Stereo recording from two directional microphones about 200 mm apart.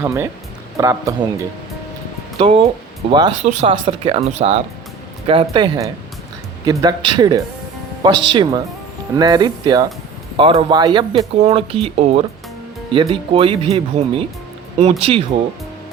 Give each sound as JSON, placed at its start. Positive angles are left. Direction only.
{"t": 0.0, "sound": "speech", "side_deg": -10}
{"t": 3.1, "sound": "speech", "side_deg": -25}